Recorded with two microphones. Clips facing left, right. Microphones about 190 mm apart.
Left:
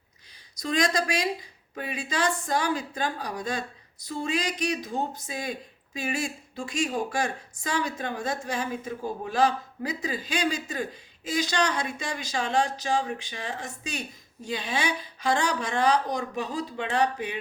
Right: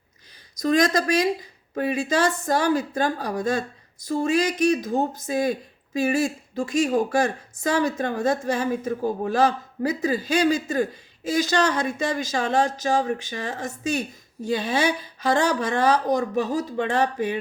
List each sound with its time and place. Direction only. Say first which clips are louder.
0.6 s speech: right 6 dB; 45° right (ahead or behind)